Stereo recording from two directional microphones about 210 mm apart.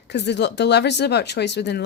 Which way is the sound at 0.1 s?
55° left (ahead or behind).